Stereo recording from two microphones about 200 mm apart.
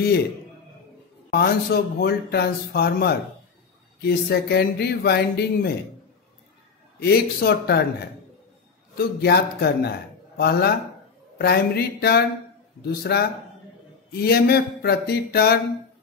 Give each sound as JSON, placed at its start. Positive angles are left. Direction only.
{"t": 1.3, "sound": "speech", "side_deg": 50}
{"t": 7.0, "sound": "speech", "side_deg": 50}
{"t": 8.9, "sound": "a man's voice", "side_deg": 55}